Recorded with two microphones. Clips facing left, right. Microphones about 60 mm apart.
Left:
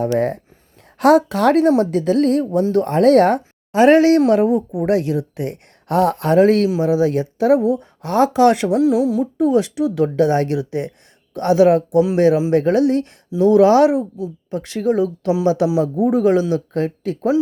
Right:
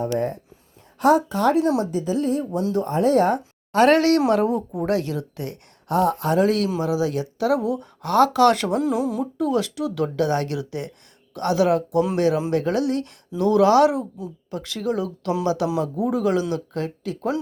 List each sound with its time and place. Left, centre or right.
0.0 s a woman's voice: left
1.8 s speech: left
3.7 s speech: centre
4.9 s speech: left
5.9 s speech: left
8.7 s speech: centre
9.4 s speech: left